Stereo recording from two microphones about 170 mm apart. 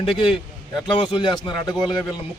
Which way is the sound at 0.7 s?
25° left (ahead or behind).